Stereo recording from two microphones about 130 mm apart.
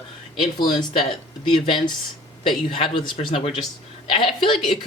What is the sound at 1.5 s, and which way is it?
A woman's voice, 40° left (ahead or behind).